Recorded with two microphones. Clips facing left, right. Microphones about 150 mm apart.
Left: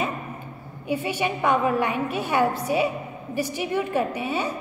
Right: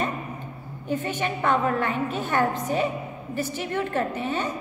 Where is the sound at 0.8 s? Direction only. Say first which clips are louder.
Left 2 dB; 10° left (ahead or behind).